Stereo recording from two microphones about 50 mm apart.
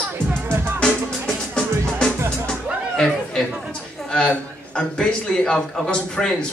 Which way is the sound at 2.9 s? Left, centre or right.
Centre.